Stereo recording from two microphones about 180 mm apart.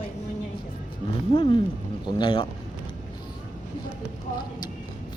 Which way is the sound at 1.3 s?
30° left (ahead or behind).